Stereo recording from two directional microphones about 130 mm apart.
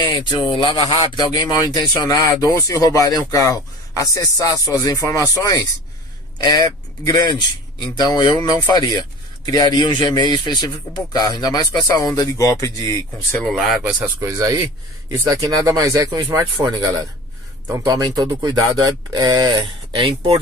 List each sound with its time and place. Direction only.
0.0 s speech: 35° left (ahead or behind)
13.4 s speech: centre (ahead or behind)
14.0 s speech: 25° right (ahead or behind)
20.0 s speech: 45° right (ahead or behind)